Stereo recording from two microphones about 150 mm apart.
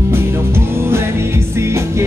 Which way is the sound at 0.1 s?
15° right (ahead or behind).